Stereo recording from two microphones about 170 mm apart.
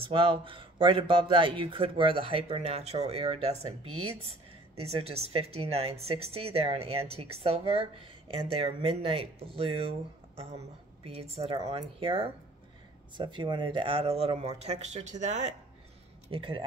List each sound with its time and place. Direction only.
0.0 s speech: 30° right (ahead or behind)
16.3 s speech: 30° right (ahead or behind)